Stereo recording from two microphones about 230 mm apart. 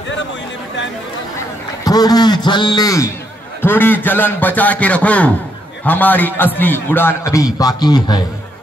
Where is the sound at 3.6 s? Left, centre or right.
Centre.